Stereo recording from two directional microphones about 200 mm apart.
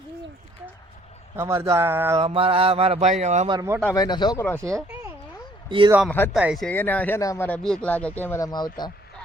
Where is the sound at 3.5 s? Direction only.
15° right (ahead or behind).